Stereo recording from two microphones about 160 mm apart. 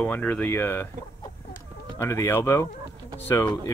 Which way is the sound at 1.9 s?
15° left (ahead or behind).